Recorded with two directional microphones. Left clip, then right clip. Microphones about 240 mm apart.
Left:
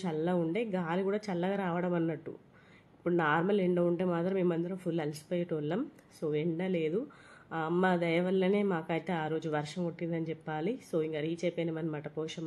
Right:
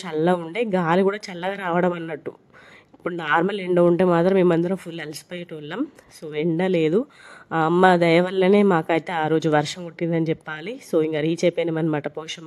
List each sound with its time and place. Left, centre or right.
0.0 s speech: right